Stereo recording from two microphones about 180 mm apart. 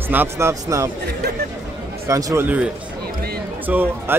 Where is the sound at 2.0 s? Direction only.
15° right (ahead or behind).